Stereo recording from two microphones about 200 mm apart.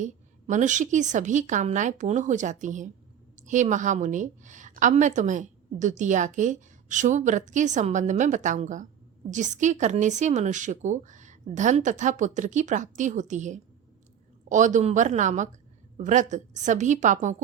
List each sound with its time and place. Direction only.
0.0 s a woman's voice: 40° right (ahead or behind)